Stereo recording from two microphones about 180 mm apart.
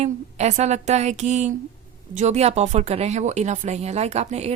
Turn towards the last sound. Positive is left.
turn(degrees=-35)  # may be behind; listen again after turning